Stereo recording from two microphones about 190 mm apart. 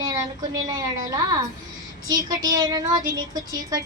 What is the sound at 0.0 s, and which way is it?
A woman's voice, 15° right (ahead or behind).